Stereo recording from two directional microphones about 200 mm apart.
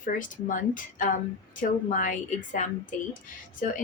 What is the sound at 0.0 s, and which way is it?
Speech, 40° left (ahead or behind).